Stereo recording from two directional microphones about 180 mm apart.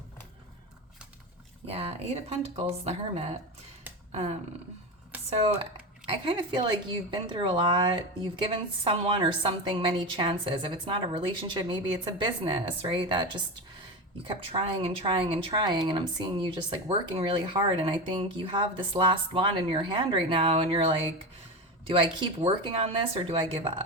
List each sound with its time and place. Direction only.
1.6 s speech: 35° right (ahead or behind)
6.1 s speech: 25° right (ahead or behind)